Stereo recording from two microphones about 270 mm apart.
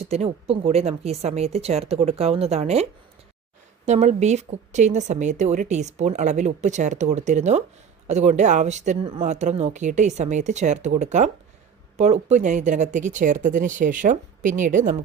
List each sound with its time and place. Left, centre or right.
0.0 s a woman's voice: right
3.8 s a woman's voice: right